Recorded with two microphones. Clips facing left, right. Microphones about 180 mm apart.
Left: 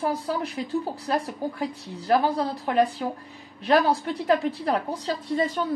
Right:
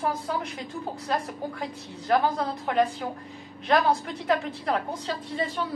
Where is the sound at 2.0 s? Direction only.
35° left (ahead or behind).